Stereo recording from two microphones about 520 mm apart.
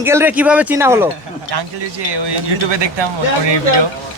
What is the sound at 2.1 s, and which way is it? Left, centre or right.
Speech, right.